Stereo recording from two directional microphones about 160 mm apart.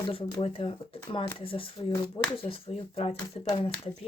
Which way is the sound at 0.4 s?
35° left (ahead or behind).